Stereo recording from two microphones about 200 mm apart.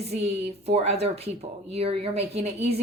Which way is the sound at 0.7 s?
30° right (ahead or behind).